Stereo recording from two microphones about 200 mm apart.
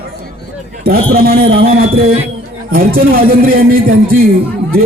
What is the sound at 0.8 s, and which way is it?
A man's voice, 50° right (ahead or behind).